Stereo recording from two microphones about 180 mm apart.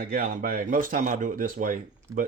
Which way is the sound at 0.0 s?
55° right (ahead or behind).